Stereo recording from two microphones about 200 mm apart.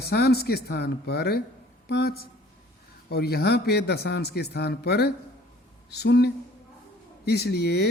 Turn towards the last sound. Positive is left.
turn(degrees=55)  # may be behind; listen again after turning